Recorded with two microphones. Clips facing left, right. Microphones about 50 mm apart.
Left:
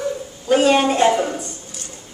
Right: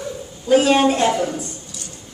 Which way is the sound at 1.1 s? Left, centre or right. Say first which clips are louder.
Left 2 dB; left.